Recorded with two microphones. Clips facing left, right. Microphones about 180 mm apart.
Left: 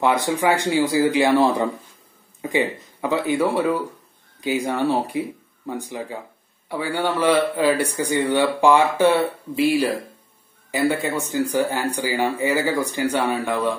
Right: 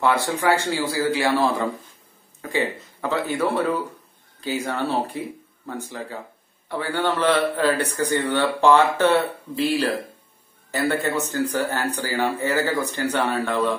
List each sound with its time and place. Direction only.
0.0 s a man's voice: 15° left (ahead or behind)